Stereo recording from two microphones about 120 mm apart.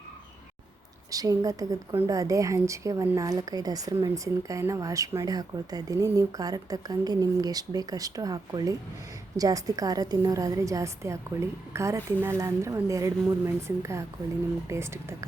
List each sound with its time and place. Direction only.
1.1 s a woman's voice: 30° right (ahead or behind)